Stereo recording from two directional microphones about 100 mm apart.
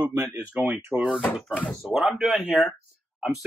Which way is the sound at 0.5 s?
25° right (ahead or behind).